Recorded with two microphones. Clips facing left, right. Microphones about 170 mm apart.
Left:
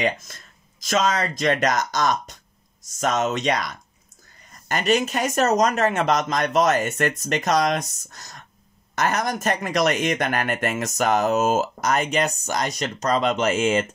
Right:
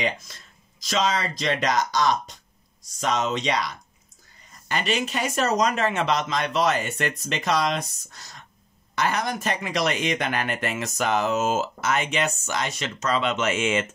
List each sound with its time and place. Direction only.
0.3 s speech: 50° left (ahead or behind)